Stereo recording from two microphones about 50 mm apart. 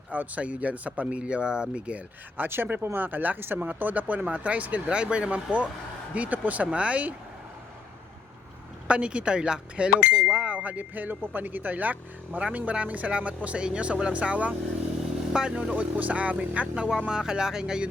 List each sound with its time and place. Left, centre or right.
0.1 s speech: right
2.4 s speech: right
8.9 s speech: right
15.3 s speech: centre
15.7 s speech: right
17.1 s speech: centre